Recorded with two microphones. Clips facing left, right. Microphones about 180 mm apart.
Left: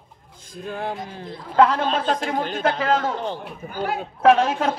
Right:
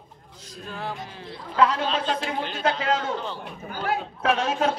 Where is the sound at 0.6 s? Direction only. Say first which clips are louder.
Left 5 dB; 50° left (ahead or behind).